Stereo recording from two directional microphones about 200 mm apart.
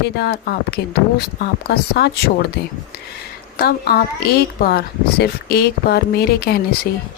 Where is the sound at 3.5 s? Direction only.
50° left (ahead or behind).